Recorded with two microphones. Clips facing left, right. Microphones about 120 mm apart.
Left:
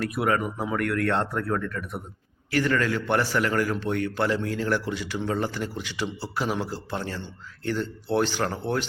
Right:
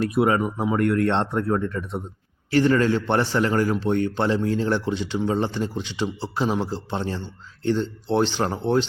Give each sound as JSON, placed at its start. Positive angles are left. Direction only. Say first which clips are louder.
{"t": 0.0, "sound": "a man's voice", "louder": "right 5 dB", "side_deg": -25}